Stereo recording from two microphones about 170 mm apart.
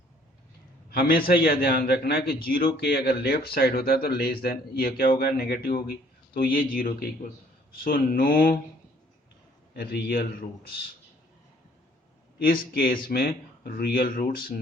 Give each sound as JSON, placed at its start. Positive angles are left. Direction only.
{"t": 0.9, "sound": "speech", "side_deg": 65}
{"t": 9.7, "sound": "speech", "side_deg": 65}
{"t": 12.5, "sound": "speech", "side_deg": 60}